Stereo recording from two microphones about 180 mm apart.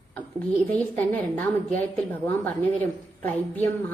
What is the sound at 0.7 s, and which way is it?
Speech, 10° left (ahead or behind).